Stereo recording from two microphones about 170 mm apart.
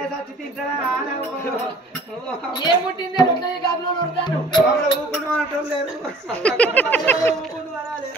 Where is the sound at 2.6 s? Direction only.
25° left (ahead or behind).